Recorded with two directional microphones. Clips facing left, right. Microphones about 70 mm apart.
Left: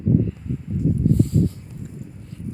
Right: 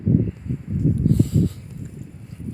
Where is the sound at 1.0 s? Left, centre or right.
Right.